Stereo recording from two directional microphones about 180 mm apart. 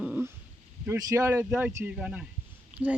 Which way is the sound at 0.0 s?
10° right (ahead or behind).